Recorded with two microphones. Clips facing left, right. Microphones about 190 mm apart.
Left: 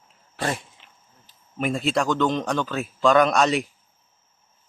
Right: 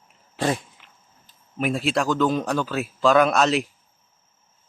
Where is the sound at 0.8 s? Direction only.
25° left (ahead or behind).